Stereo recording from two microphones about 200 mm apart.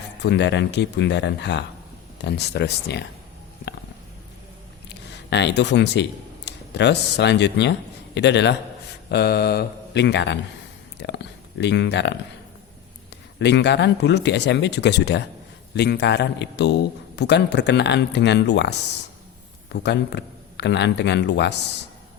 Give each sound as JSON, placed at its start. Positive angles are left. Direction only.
{"t": 0.2, "sound": "a man's voice", "side_deg": 60}
{"t": 4.9, "sound": "a man's voice", "side_deg": 60}
{"t": 13.4, "sound": "a man's voice", "side_deg": 60}
{"t": 19.7, "sound": "a man's voice", "side_deg": 55}